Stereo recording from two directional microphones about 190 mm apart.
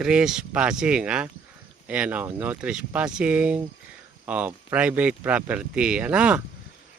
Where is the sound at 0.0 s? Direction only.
5° right (ahead or behind).